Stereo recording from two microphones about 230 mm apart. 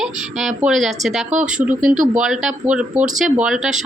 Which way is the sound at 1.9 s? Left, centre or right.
Right.